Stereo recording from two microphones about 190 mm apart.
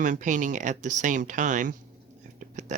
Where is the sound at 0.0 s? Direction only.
40° right (ahead or behind).